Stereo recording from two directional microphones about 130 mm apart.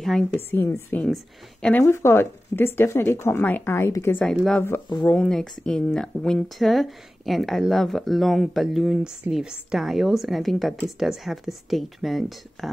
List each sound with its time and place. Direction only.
0.5 s speech: 20° left (ahead or behind)
1.0 s speech: 5° left (ahead or behind)
1.8 s speech: 20° left (ahead or behind)
4.2 s speech: 5° left (ahead or behind)